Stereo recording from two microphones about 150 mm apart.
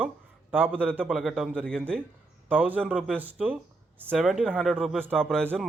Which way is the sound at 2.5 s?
10° right (ahead or behind).